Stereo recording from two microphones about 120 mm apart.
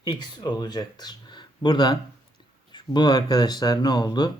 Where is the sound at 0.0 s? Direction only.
40° left (ahead or behind).